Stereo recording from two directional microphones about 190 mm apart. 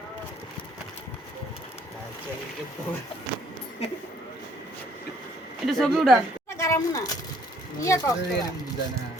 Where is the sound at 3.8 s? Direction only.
30° left (ahead or behind).